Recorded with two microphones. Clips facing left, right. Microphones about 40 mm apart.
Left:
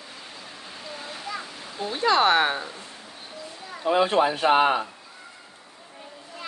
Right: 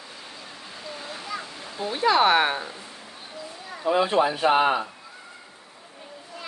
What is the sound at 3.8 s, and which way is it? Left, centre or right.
Speech, left.